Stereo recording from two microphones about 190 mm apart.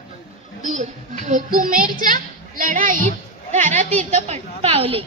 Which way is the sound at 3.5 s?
40° right (ahead or behind).